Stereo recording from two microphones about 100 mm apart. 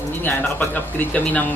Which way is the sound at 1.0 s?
15° left (ahead or behind).